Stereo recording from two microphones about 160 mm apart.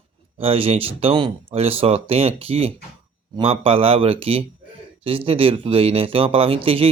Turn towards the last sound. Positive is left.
turn(degrees=-35)  # may be behind; listen again after turning